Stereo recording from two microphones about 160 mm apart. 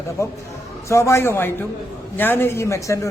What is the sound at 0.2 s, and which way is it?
A man's voice, 20° left (ahead or behind).